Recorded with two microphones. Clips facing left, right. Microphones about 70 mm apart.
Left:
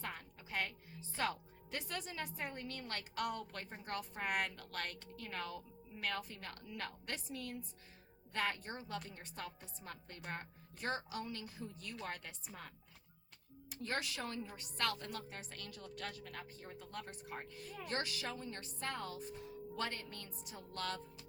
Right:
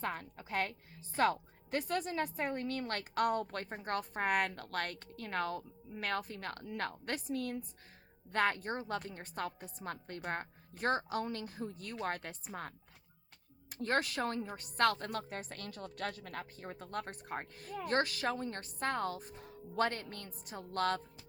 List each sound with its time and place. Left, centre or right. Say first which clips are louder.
0.0 s a woman's voice: right 8 dB; right
13.8 s a woman's voice: right 8 dB; right